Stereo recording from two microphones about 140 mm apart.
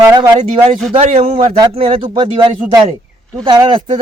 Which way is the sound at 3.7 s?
40° right (ahead or behind).